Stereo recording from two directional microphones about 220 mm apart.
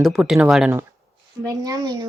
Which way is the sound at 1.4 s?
15° right (ahead or behind).